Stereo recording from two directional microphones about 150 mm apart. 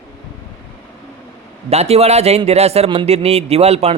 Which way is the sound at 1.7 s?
45° right (ahead or behind).